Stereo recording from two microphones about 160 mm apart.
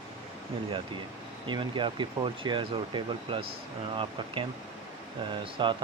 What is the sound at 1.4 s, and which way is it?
Speech, 30° right (ahead or behind).